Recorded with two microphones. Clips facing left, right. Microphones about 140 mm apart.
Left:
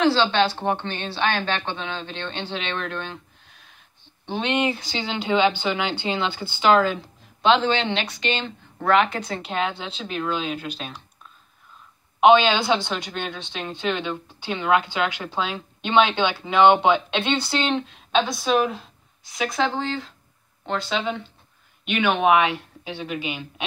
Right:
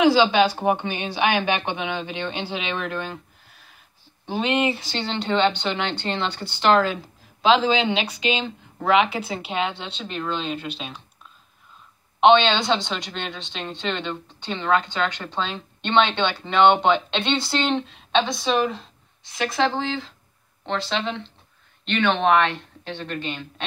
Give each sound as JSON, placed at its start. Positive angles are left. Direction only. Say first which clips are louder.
{"t": 0.0, "sound": "speech", "louder": "right 3 dB", "side_deg": -10}
{"t": 12.2, "sound": "a woman's voice", "louder": "even", "side_deg": 5}